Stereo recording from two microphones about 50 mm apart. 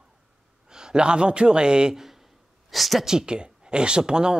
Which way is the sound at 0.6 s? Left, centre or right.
Centre.